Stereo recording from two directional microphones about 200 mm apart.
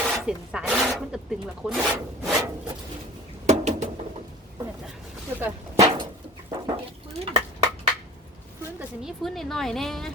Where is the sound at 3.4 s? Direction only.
35° right (ahead or behind).